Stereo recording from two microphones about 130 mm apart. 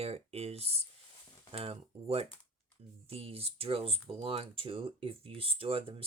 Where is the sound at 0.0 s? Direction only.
50° right (ahead or behind).